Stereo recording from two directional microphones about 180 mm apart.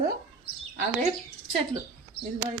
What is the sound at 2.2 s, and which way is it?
Speech, 65° left (ahead or behind).